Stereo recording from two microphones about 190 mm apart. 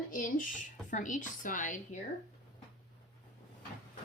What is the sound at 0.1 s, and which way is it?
Speech, 45° left (ahead or behind).